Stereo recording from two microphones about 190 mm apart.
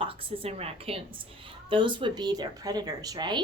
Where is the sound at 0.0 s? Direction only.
30° right (ahead or behind).